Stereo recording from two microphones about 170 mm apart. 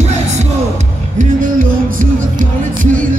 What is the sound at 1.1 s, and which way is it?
Music, 50° right (ahead or behind).